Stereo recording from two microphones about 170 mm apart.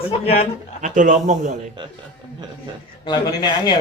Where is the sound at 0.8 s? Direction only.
50° right (ahead or behind).